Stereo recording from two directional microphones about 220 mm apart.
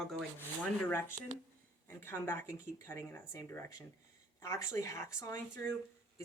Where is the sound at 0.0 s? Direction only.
5° left (ahead or behind).